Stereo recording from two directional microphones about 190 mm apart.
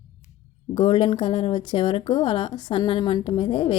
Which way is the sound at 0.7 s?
30° left (ahead or behind).